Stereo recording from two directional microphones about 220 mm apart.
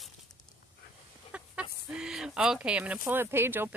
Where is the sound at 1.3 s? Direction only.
5° right (ahead or behind).